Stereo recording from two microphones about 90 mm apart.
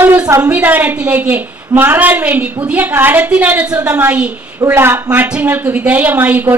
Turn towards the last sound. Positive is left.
turn(degrees=-20)  # may be behind; listen again after turning